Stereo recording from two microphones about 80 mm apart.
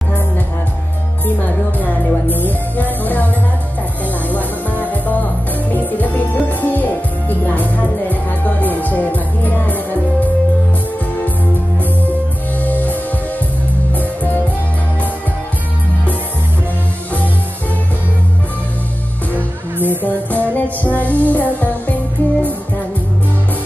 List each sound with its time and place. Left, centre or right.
1.8 s music: left
4.3 s music: left
12.6 s music: left
13.9 s music: left
19.3 s music: right
20.1 s music: left